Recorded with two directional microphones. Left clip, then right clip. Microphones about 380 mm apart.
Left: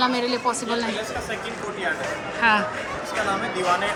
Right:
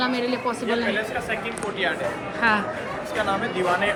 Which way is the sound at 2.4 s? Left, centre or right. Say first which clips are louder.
Left 2 dB; centre.